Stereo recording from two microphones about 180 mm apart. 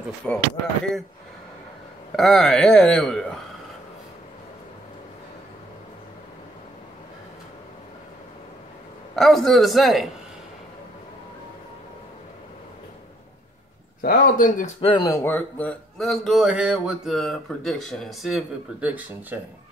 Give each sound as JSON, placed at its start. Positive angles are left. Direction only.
{"t": 0.2, "sound": "speech", "side_deg": 5}
{"t": 2.1, "sound": "speech", "side_deg": 0}
{"t": 9.1, "sound": "speech", "side_deg": 0}
{"t": 14.0, "sound": "speech", "side_deg": 55}
{"t": 14.8, "sound": "speech", "side_deg": 30}
{"t": 15.0, "sound": "speech", "side_deg": 15}